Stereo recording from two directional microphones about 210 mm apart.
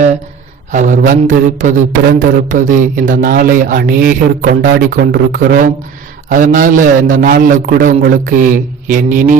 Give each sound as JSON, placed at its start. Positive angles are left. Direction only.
{"t": 0.7, "sound": "speech", "side_deg": -40}